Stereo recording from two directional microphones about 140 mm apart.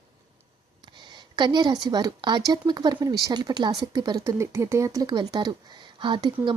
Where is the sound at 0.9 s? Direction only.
30° right (ahead or behind).